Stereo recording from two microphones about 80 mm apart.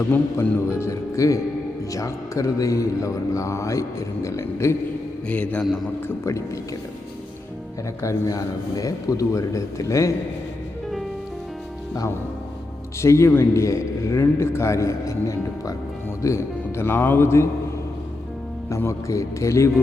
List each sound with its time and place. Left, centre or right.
0.3 s a man's voice: left
5.3 s a man's voice: centre
6.1 s a man's voice: left
8.0 s a man's voice: left
13.0 s a man's voice: left
18.7 s a man's voice: left